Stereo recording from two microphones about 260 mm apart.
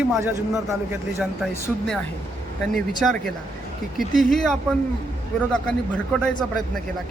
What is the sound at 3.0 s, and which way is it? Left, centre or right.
Speech, centre.